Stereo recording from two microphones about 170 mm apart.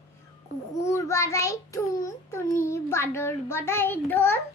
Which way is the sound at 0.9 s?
15° left (ahead or behind).